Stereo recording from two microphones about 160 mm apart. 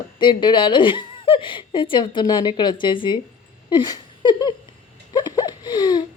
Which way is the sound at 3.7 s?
25° left (ahead or behind).